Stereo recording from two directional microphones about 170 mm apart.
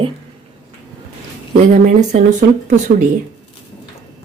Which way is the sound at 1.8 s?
45° right (ahead or behind).